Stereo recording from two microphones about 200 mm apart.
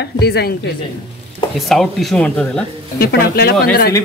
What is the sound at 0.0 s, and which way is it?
Speech, 55° left (ahead or behind).